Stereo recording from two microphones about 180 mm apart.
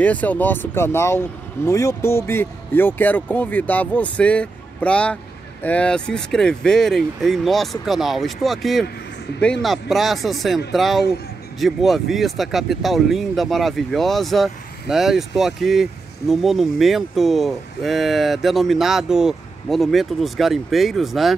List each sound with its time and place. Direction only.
0.0 s speech: 10° left (ahead or behind)